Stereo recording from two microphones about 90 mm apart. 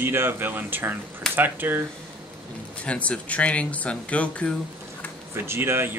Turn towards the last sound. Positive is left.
turn(degrees=-25)  # may be behind; listen again after turning